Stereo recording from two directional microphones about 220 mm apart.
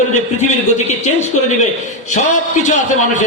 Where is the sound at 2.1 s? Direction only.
35° left (ahead or behind).